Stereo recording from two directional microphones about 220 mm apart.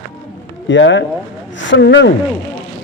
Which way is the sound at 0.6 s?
55° left (ahead or behind).